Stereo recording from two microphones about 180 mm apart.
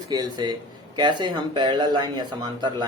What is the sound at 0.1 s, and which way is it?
Speech, 20° right (ahead or behind).